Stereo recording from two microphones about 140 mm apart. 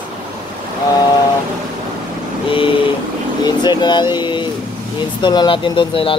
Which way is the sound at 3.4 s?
30° left (ahead or behind).